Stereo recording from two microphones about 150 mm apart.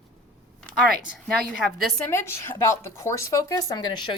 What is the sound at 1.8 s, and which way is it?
Speech, 5° left (ahead or behind).